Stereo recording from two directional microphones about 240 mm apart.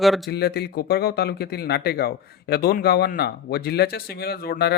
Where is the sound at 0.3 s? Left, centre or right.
Left.